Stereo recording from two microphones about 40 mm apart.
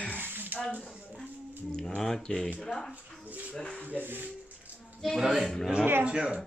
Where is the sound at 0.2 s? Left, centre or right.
Right.